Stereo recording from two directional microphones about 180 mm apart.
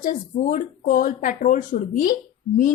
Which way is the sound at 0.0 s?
45° left (ahead or behind).